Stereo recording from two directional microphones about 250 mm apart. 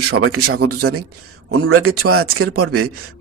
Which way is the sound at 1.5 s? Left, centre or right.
Right.